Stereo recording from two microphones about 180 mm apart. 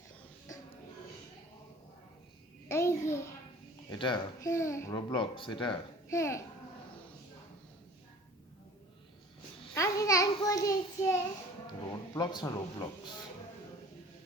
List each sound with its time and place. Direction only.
2.6 s babbling: 15° left (ahead or behind)
3.8 s a child's voice: 25° left (ahead or behind)
9.7 s a sound: 15° left (ahead or behind)
12.1 s a child's voice: 20° left (ahead or behind)